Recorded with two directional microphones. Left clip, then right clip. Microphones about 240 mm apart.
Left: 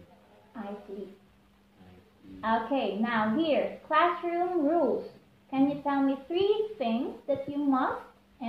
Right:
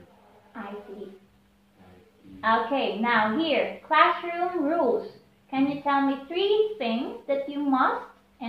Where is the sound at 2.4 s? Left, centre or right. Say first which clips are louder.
Right 5 dB; left.